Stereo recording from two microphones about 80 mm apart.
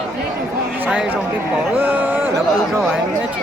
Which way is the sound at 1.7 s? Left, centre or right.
Right.